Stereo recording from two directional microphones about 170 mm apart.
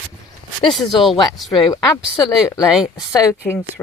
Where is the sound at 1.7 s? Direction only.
15° left (ahead or behind).